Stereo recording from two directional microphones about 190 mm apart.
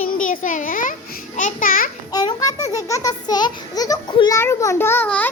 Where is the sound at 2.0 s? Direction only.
20° left (ahead or behind).